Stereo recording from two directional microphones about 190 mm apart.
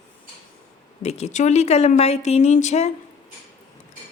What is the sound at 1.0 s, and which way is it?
A woman's voice, 35° left (ahead or behind).